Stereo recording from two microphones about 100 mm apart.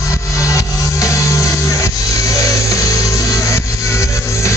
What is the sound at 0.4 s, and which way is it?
Music, 35° left (ahead or behind).